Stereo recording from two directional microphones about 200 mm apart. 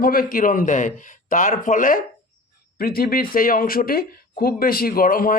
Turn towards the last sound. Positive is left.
turn(degrees=45)  # may be behind; listen again after turning